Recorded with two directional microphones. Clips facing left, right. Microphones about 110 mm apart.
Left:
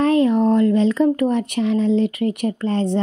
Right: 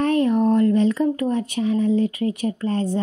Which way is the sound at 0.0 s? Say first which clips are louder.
Left 3 dB; 90° left.